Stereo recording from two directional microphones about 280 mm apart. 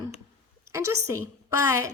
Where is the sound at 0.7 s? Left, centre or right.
Centre.